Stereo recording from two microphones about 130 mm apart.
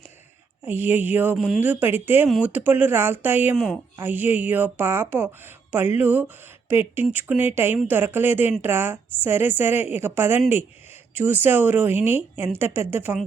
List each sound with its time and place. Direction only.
0.6 s speech: 15° right (ahead or behind)
3.5 s a woman's voice: 5° right (ahead or behind)